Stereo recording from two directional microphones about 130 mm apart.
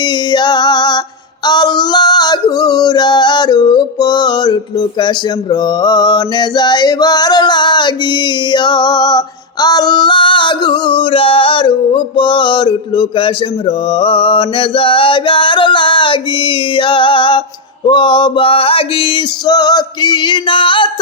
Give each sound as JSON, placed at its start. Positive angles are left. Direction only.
{"t": 0.0, "sound": "female singing", "side_deg": 35}
{"t": 1.5, "sound": "male singing", "side_deg": 35}
{"t": 17.8, "sound": "a sound", "side_deg": 35}
{"t": 19.5, "sound": "male singing", "side_deg": 30}